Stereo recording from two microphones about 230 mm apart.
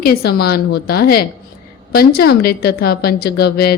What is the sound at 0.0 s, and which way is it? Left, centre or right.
A woman's voice, left.